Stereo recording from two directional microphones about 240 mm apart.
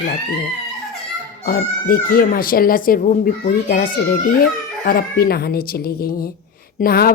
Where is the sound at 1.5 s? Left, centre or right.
Left.